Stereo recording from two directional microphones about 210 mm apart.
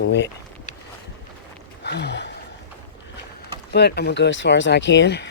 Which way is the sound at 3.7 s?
50° left (ahead or behind).